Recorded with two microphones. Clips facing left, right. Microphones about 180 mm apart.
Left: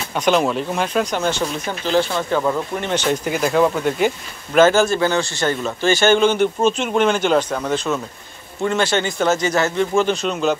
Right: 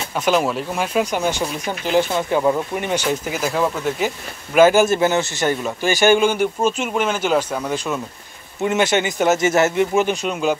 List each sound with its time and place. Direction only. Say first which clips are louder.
0.1 s speech: left 1 dB; 5° right (ahead or behind)